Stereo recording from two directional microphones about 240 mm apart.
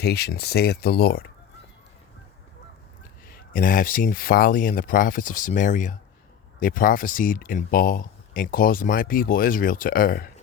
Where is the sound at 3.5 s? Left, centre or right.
Left.